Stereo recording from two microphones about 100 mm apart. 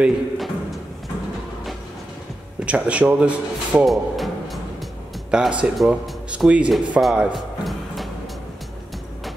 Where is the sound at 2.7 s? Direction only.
10° right (ahead or behind).